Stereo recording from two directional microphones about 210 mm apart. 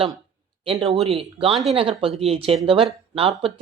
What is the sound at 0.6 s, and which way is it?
Speech, 30° right (ahead or behind).